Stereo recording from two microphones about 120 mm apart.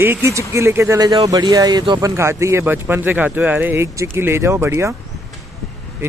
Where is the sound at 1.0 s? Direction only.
30° right (ahead or behind).